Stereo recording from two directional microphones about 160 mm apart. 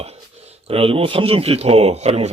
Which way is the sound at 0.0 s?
40° right (ahead or behind).